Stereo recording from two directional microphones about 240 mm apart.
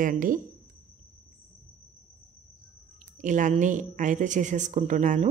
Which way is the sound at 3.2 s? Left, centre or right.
Right.